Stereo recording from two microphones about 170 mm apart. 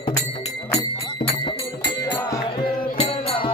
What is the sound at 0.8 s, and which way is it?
Music, 30° left (ahead or behind).